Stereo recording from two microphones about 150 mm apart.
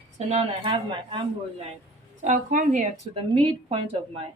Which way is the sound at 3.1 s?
35° right (ahead or behind).